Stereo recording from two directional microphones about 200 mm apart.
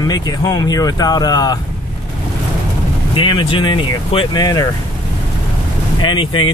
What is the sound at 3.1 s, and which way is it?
Speech, 25° left (ahead or behind).